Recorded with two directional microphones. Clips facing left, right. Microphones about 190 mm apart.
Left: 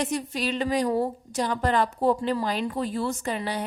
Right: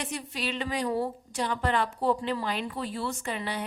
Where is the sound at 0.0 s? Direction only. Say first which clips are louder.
Left 6 dB; 40° left (ahead or behind).